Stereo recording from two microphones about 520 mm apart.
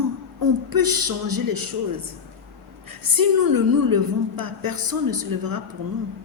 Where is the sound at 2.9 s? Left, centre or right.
Right.